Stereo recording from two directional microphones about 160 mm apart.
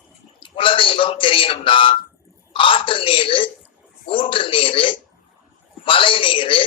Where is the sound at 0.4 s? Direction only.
35° left (ahead or behind).